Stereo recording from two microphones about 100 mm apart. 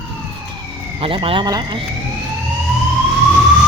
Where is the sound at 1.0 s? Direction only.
65° right (ahead or behind).